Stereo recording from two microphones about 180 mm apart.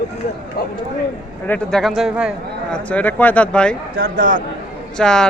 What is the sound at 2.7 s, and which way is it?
Speech, 10° left (ahead or behind).